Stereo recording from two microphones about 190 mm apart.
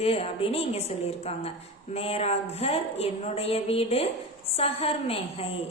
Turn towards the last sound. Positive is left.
turn(degrees=30)  # may be behind; listen again after turning